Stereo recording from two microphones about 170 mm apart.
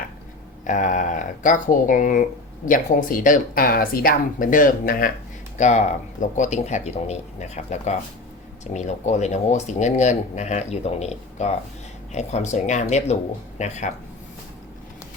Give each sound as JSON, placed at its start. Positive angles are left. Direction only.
{"t": 0.6, "sound": "speech", "side_deg": 45}